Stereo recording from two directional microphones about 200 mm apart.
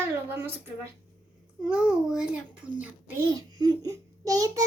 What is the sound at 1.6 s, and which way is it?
A child's voice, 5° right (ahead or behind).